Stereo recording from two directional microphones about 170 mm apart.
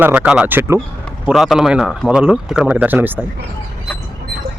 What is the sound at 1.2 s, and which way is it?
A man's voice, centre (ahead or behind).